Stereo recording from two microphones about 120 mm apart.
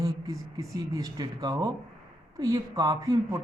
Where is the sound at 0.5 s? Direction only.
30° right (ahead or behind).